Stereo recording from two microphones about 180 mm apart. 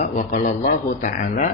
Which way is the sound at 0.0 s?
45° left (ahead or behind).